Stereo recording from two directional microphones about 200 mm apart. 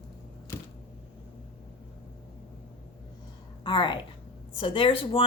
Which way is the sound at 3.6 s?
25° left (ahead or behind).